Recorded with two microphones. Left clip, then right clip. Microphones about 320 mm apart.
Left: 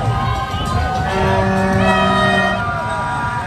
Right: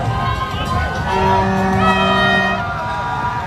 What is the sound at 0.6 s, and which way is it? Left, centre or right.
Music, centre.